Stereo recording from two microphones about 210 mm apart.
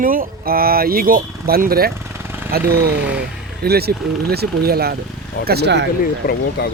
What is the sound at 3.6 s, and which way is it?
Speech, 50° right (ahead or behind).